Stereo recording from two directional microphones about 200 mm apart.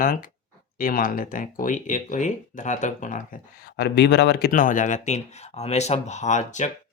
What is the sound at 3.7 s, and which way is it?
Speech, 55° left (ahead or behind).